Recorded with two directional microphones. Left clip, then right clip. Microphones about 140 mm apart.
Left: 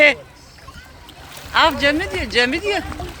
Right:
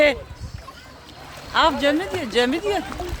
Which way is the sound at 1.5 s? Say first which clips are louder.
Left 3 dB; 20° right (ahead or behind).